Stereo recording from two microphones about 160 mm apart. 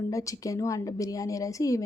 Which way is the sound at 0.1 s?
20° left (ahead or behind).